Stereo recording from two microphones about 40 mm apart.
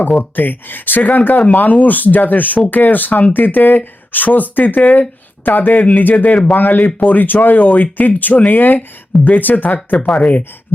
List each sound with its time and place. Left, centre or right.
0.2 s speech: left
6.3 s speech: centre
6.6 s speech: left